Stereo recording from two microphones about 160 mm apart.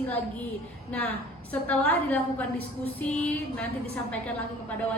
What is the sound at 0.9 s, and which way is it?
A woman's voice, 10° left (ahead or behind).